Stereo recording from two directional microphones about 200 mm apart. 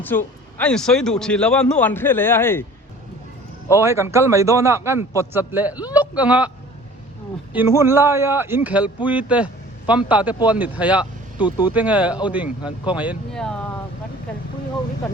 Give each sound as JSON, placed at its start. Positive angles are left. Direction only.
{"t": 0.0, "sound": "a man's voice", "side_deg": 10}
{"t": 3.8, "sound": "a man's voice", "side_deg": -15}
{"t": 7.5, "sound": "a man's voice", "side_deg": -10}
{"t": 11.3, "sound": "speech", "side_deg": 20}
{"t": 11.7, "sound": "a man's voice", "side_deg": -5}